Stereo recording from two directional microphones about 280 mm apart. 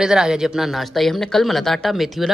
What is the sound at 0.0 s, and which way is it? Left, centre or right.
Speech, centre.